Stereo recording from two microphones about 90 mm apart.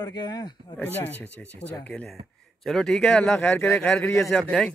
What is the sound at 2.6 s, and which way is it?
A man's voice, 5° left (ahead or behind).